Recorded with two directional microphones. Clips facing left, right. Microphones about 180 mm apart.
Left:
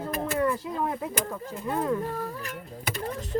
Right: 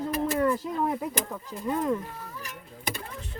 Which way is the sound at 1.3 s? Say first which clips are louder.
Even; 5° right (ahead or behind).